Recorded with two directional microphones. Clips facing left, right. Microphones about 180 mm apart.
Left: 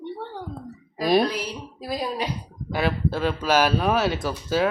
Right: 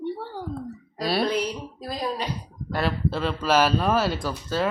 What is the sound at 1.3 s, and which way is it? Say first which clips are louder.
Speech: right 4 dB; 5° left (ahead or behind).